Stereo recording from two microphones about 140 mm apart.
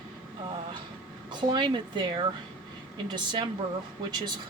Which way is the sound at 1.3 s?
35° right (ahead or behind).